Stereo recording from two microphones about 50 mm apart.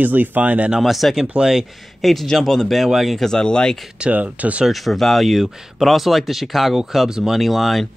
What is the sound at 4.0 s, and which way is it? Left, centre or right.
Speech, right.